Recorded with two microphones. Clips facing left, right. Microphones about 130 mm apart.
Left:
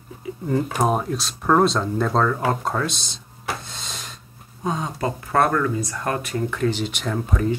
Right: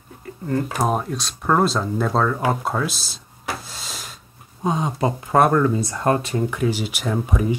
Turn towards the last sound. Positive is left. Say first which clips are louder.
# right 1 dB
turn(degrees=-10)  # may be behind; listen again after turning